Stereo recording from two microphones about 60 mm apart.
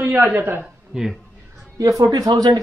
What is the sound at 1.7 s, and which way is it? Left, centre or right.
Speech, right.